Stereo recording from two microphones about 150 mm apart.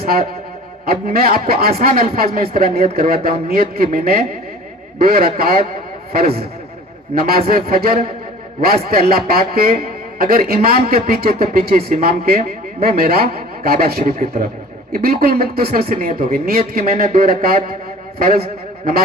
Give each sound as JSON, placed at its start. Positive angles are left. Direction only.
{"t": 0.0, "sound": "music", "side_deg": -90}
{"t": 0.9, "sound": "a man's voice", "side_deg": -90}